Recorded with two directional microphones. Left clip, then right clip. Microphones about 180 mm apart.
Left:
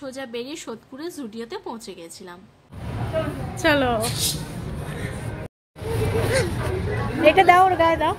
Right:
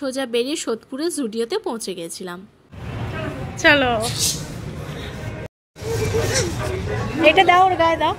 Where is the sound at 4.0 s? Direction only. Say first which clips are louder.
Right 2 dB; 10° right (ahead or behind).